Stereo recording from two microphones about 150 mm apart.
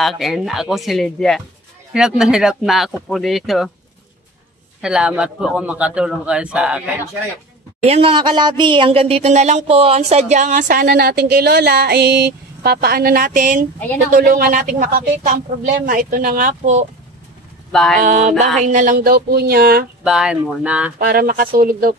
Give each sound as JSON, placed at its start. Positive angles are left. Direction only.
{"t": 0.0, "sound": "speech", "side_deg": 0}
{"t": 4.8, "sound": "a man's voice", "side_deg": -5}
{"t": 7.8, "sound": "speech", "side_deg": -40}
{"t": 14.1, "sound": "speech", "side_deg": -75}
{"t": 17.6, "sound": "speech", "side_deg": 5}
{"t": 17.9, "sound": "speech", "side_deg": -55}
{"t": 20.0, "sound": "a man's voice", "side_deg": -5}
{"t": 21.0, "sound": "speech", "side_deg": -70}